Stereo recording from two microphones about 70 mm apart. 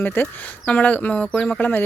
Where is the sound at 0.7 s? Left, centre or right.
Left.